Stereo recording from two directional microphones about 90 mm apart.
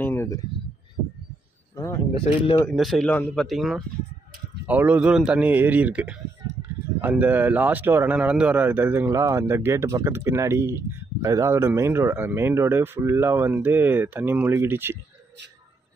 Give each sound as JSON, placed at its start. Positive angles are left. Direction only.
{"t": 0.0, "sound": "a sound", "side_deg": 25}
{"t": 2.1, "sound": "speech", "side_deg": 90}
{"t": 2.7, "sound": "speech", "side_deg": 0}
{"t": 3.1, "sound": "speech", "side_deg": 10}
{"t": 3.4, "sound": "speech", "side_deg": 0}
{"t": 4.6, "sound": "a man's voice", "side_deg": -20}
{"t": 8.2, "sound": "a man's voice", "side_deg": -15}
{"t": 9.1, "sound": "speech", "side_deg": -35}